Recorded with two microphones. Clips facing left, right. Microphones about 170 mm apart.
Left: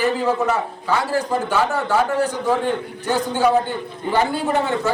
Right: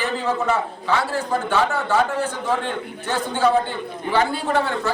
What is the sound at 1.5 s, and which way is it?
A man's voice, 10° left (ahead or behind).